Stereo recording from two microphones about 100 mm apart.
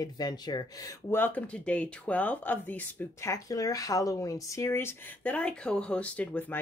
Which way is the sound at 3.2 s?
35° left (ahead or behind).